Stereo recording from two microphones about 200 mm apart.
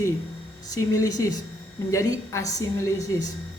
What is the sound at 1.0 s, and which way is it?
A woman's voice, 15° left (ahead or behind).